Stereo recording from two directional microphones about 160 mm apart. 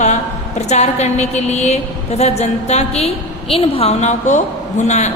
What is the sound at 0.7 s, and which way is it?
A woman's voice, 45° left (ahead or behind).